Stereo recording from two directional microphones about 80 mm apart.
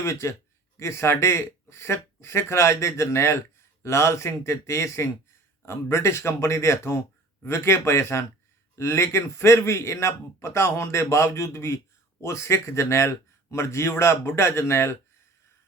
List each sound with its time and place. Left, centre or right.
0.0 s a man's voice: left